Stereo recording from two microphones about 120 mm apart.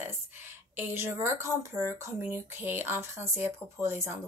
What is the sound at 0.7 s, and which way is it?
A woman's voice, 20° right (ahead or behind).